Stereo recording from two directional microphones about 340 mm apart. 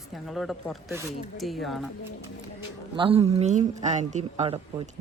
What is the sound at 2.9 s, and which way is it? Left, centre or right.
Speech, centre.